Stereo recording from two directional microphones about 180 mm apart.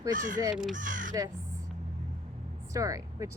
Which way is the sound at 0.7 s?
45° right (ahead or behind).